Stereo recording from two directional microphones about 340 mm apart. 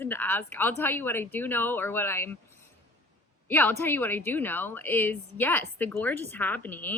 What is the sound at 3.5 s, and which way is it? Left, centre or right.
A woman's voice, centre.